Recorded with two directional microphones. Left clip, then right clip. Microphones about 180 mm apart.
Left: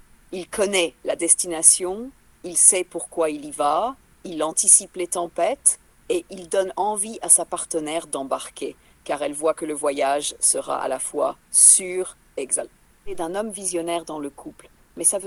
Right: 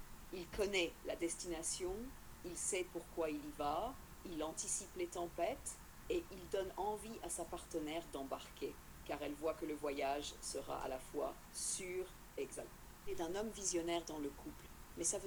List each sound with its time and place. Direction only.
0.3 s a woman's voice: 50° left (ahead or behind)